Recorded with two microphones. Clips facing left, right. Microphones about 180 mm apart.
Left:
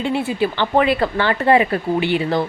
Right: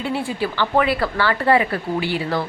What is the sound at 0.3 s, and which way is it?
A woman's voice, 20° left (ahead or behind).